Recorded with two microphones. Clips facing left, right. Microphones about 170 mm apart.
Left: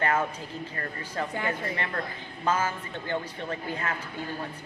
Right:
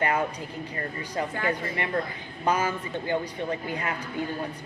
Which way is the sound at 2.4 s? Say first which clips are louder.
Right 2 dB; 15° right (ahead or behind).